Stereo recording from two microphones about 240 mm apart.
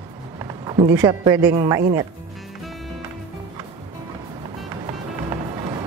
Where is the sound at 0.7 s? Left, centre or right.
Centre.